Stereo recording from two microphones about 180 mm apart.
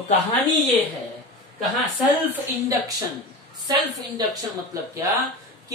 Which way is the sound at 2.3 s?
20° right (ahead or behind).